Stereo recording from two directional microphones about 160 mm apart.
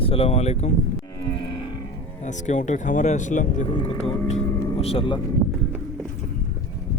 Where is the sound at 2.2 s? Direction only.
50° left (ahead or behind); by 5.2 s 35° left (ahead or behind).